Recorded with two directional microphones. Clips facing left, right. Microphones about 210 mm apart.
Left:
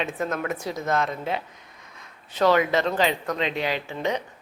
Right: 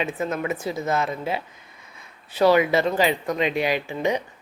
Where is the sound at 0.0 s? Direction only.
5° right (ahead or behind).